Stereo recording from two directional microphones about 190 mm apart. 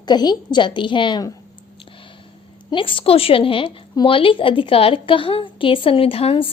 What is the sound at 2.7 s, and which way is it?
A woman's voice, 25° left (ahead or behind).